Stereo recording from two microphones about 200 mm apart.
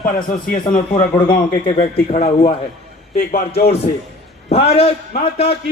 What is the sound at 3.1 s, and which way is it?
Speech, 45° left (ahead or behind).